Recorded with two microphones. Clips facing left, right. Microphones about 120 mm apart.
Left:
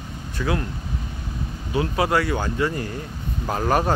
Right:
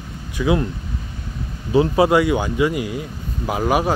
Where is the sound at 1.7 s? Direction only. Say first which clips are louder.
Right 7 dB; 25° right (ahead or behind); by 3.9 s 5° right (ahead or behind).